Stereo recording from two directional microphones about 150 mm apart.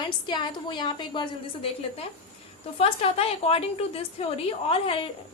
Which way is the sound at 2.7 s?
40° left (ahead or behind).